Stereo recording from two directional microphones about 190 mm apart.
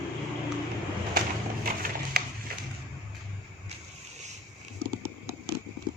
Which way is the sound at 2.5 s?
50° right (ahead or behind).